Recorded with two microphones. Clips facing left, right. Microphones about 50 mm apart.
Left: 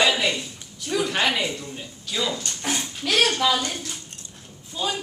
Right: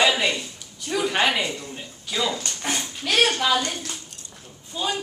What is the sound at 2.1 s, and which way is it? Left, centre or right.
Speech, centre.